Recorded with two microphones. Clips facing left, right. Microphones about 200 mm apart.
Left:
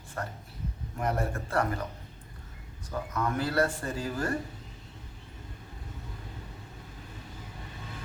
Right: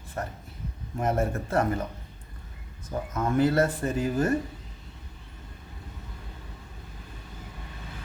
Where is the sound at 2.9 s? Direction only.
25° right (ahead or behind).